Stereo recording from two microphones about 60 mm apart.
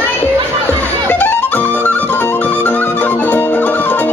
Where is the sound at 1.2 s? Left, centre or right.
Left.